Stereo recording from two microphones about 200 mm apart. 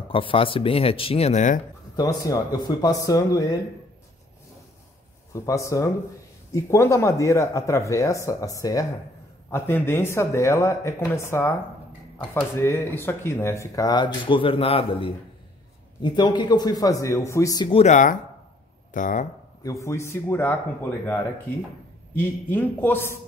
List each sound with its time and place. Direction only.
0.1 s a man's voice: 25° left (ahead or behind)
2.0 s speech: 20° left (ahead or behind)
5.3 s a man's voice: 15° left (ahead or behind); by 19.2 s 40° left (ahead or behind)
19.6 s speech: 15° left (ahead or behind)
22.1 s speech: 10° left (ahead or behind)